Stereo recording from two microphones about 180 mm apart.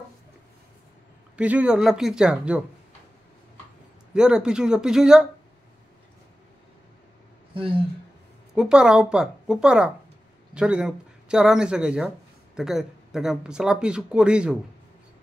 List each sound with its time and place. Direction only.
1.3 s speech: 5° right (ahead or behind)
4.1 s speech: 5° right (ahead or behind)
7.5 s speech: 30° right (ahead or behind)
8.5 s speech: 5° right (ahead or behind)